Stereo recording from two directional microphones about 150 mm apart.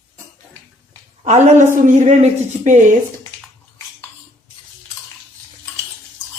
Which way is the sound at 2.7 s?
55° right (ahead or behind).